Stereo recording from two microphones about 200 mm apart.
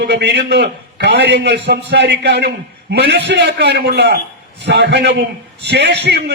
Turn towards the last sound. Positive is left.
turn(degrees=-55)  # may be behind; listen again after turning